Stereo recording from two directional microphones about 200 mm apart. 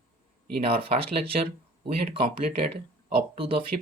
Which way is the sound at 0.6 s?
30° right (ahead or behind).